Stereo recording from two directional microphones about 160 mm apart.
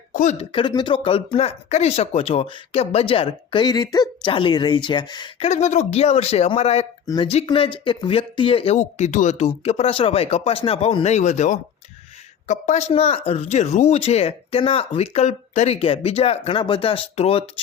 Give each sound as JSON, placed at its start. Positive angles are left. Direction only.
{"t": 0.1, "sound": "a sound", "side_deg": 55}
{"t": 0.3, "sound": "speech", "side_deg": 35}
{"t": 5.4, "sound": "speech", "side_deg": 45}
{"t": 9.6, "sound": "speech", "side_deg": 40}